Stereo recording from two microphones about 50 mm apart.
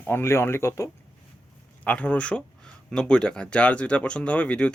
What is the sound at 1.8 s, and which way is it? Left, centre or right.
Speech, left.